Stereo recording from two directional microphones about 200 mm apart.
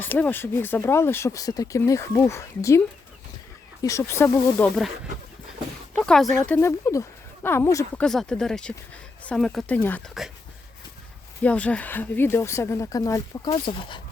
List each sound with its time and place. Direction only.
0.0 s speech: 10° left (ahead or behind)
3.8 s speech: 15° left (ahead or behind)
5.9 s speech: 5° left (ahead or behind)
8.0 s speech: centre (ahead or behind)
11.4 s speech: 5° left (ahead or behind); by 14.0 s 25° left (ahead or behind)